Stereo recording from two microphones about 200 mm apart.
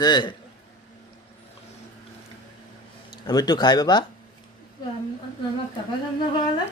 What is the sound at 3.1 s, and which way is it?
Speech, 20° left (ahead or behind).